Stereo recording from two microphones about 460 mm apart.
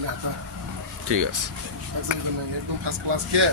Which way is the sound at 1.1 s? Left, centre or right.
Right.